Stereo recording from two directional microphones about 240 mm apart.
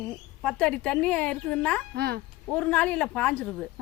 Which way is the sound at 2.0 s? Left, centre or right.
Right.